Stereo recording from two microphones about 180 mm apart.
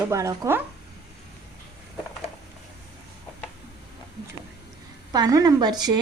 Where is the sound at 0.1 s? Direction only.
15° right (ahead or behind).